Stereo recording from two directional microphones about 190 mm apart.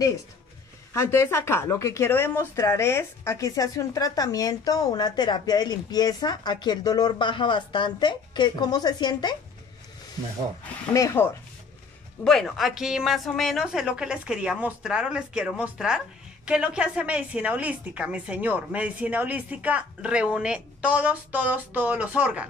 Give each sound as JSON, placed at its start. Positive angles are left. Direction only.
{"t": 0.9, "sound": "speech", "side_deg": 15}
{"t": 10.9, "sound": "speech", "side_deg": 15}
{"t": 12.3, "sound": "a woman's voice", "side_deg": 0}